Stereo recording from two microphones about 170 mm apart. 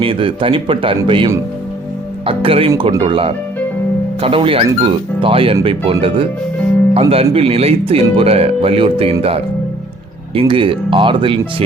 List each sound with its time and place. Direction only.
0.0 s speech: 30° right (ahead or behind)
10.5 s speech: 30° right (ahead or behind)